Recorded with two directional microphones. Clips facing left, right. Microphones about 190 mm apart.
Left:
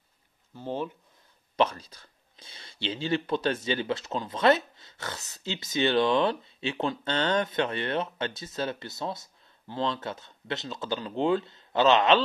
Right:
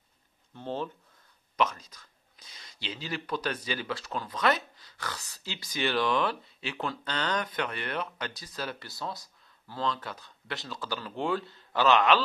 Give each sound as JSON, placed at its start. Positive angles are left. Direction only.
{"t": 0.6, "sound": "speech", "side_deg": 15}
{"t": 1.6, "sound": "speech", "side_deg": 30}